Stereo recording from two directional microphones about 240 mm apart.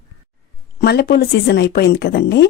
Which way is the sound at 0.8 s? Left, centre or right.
Left.